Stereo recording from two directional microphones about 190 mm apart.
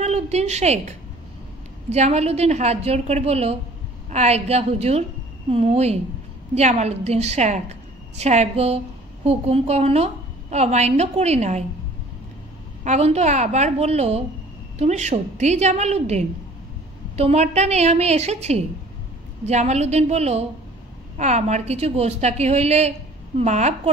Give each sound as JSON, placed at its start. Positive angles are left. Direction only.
{"t": 0.0, "sound": "a sound", "side_deg": -35}
{"t": 1.9, "sound": "a woman's voice", "side_deg": -35}
{"t": 12.8, "sound": "a woman's voice", "side_deg": -35}